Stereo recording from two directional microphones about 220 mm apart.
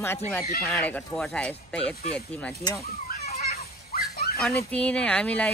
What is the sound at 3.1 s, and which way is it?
Children playing, 45° left (ahead or behind).